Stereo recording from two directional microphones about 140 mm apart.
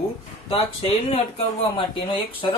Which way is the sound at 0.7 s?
45° left (ahead or behind).